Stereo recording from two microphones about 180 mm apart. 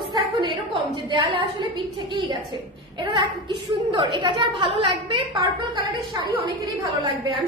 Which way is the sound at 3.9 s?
25° right (ahead or behind).